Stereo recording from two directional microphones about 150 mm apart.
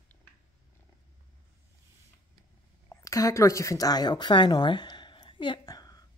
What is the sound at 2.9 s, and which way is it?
A woman's voice, 20° left (ahead or behind).